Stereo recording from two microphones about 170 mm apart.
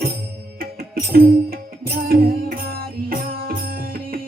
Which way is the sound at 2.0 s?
60° right (ahead or behind).